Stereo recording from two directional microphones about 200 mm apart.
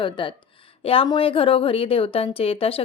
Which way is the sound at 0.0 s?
25° left (ahead or behind).